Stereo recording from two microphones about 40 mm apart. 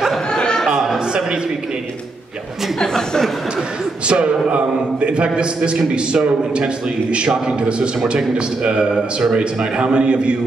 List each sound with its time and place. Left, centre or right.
0.3 s a sound: left
2.8 s speech: centre
4.1 s a man's voice: right